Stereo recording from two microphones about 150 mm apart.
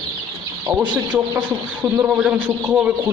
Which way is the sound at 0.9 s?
30° right (ahead or behind).